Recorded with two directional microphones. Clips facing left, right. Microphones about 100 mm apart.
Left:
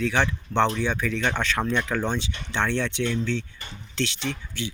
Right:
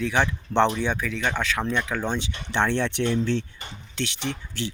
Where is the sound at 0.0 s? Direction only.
15° right (ahead or behind).